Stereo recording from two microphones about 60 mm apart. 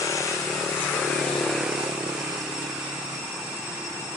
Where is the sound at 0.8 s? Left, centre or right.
Centre.